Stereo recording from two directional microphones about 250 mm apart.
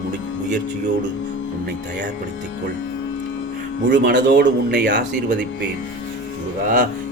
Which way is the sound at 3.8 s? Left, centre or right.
Right.